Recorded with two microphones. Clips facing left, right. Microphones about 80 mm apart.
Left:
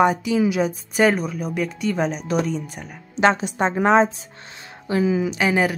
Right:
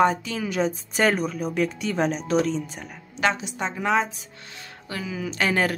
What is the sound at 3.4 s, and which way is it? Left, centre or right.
Speech, left.